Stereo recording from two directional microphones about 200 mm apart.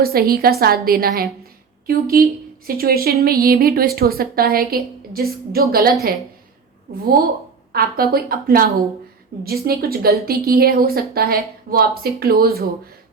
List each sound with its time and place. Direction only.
0.0 s a woman's voice: 50° right (ahead or behind)
7.7 s a woman's voice: 50° right (ahead or behind)